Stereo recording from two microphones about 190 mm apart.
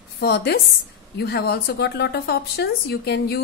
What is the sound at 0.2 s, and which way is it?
Speech, 60° left (ahead or behind).